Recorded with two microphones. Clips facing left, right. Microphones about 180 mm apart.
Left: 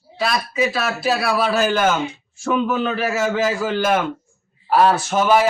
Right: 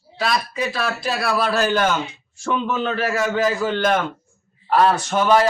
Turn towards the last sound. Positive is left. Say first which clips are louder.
# even
turn(degrees=5)  # may be behind; listen again after turning